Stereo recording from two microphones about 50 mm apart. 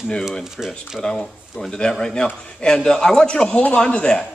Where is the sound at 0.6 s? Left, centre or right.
Centre.